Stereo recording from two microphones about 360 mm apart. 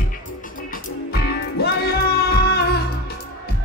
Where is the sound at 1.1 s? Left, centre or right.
Left.